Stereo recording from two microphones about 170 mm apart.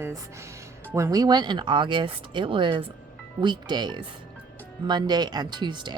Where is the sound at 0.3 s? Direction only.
15° right (ahead or behind).